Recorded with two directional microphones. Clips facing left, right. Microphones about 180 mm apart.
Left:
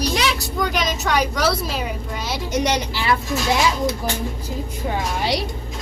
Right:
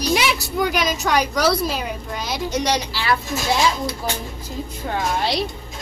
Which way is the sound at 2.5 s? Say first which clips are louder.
Left 2 dB; 20° left (ahead or behind).